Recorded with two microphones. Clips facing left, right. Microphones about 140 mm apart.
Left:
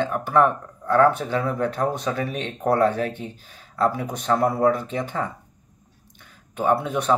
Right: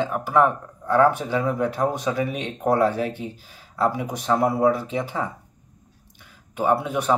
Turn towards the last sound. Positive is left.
turn(degrees=-10)  # may be behind; listen again after turning